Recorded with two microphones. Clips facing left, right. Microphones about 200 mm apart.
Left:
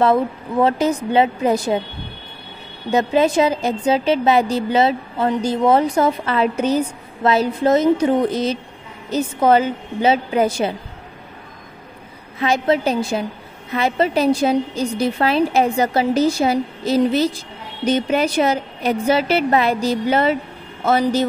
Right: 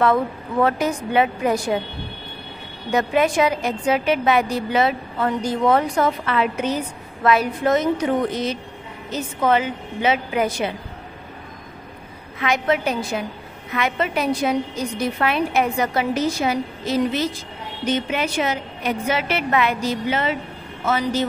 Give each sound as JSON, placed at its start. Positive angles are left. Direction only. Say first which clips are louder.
{"t": 0.0, "sound": "a woman's voice", "louder": "left 3 dB", "side_deg": 25}
{"t": 2.9, "sound": "a woman's voice", "louder": "left 3 dB", "side_deg": 25}
{"t": 12.4, "sound": "a woman's voice", "louder": "left 3 dB", "side_deg": 30}